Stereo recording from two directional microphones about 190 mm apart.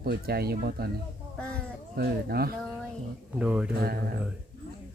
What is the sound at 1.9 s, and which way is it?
Speech, 55° right (ahead or behind).